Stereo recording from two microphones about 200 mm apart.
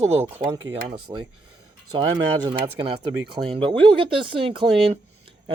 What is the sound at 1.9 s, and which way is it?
Speech, 20° right (ahead or behind).